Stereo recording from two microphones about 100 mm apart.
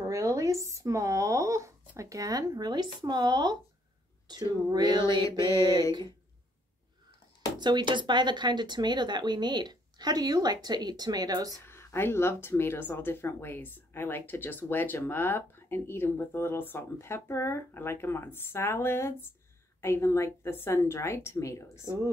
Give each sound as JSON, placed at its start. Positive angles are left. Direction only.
{"t": 0.1, "sound": "speech", "side_deg": -30}
{"t": 4.6, "sound": "speech", "side_deg": -45}
{"t": 7.5, "sound": "speech", "side_deg": -50}
{"t": 11.6, "sound": "speech", "side_deg": 25}
{"t": 21.8, "sound": "a woman's voice", "side_deg": -30}